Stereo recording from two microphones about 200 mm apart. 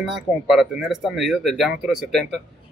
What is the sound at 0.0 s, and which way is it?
Speech, centre (ahead or behind).